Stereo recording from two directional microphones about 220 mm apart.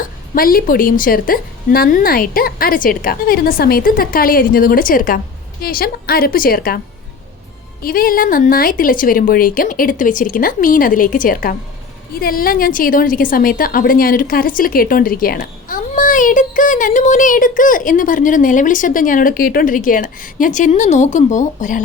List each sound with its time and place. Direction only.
0.0 s a woman's voice: 40° left (ahead or behind)